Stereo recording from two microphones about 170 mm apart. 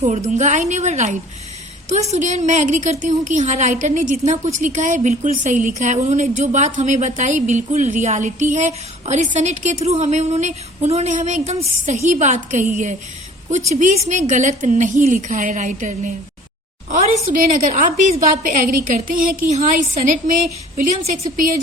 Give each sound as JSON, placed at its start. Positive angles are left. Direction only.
{"t": 0.0, "sound": "a woman's voice", "side_deg": -40}
{"t": 17.3, "sound": "a woman's voice", "side_deg": -50}